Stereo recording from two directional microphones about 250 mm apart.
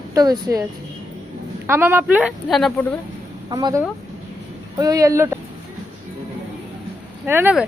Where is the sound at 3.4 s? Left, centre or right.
Centre.